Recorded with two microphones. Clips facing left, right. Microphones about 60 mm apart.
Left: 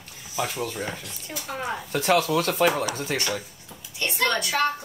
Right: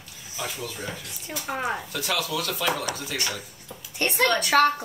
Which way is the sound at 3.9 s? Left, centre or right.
Right.